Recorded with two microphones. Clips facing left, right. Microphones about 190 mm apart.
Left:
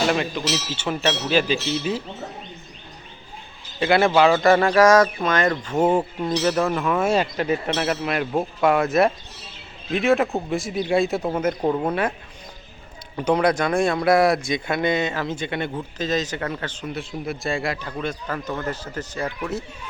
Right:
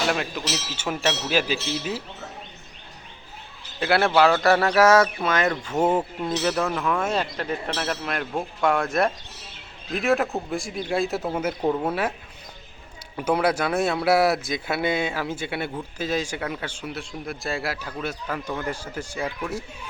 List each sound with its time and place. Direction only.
0.1 s a man's voice: 5° right (ahead or behind)
3.8 s a man's voice: centre (ahead or behind)
5.7 s a man's voice: 10° left (ahead or behind)
13.1 s a man's voice: 5° right (ahead or behind)